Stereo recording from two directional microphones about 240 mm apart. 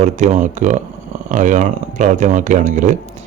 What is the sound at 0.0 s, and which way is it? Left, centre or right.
Speech, right.